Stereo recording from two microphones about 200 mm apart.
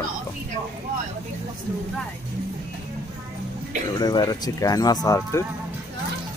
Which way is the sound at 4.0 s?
20° left (ahead or behind).